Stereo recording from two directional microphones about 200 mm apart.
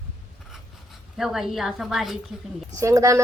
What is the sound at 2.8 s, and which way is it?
Speech, 15° right (ahead or behind).